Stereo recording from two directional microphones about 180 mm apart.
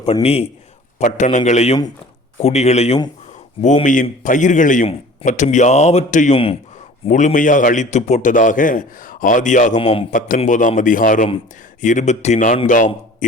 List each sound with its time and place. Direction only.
0.0 s a man's voice: 35° left (ahead or behind)
6.3 s speech: 30° left (ahead or behind)
7.1 s a man's voice: 45° left (ahead or behind)
10.1 s a man's voice: 45° left (ahead or behind)